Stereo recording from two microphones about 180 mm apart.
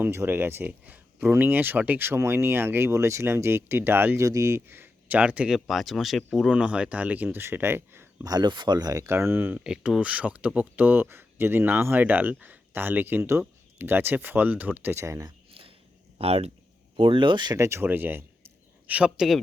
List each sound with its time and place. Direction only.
0.0 s speech: 15° right (ahead or behind)
16.1 s speech: 35° right (ahead or behind); by 19.4 s 5° right (ahead or behind)